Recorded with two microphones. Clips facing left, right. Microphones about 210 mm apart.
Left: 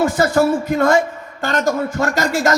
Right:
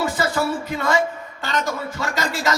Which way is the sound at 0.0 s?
45° left (ahead or behind).